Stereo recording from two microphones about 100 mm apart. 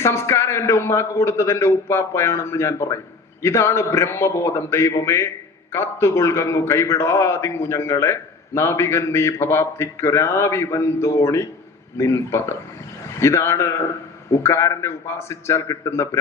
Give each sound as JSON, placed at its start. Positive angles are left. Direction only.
{"t": 0.0, "sound": "a man's voice", "side_deg": 25}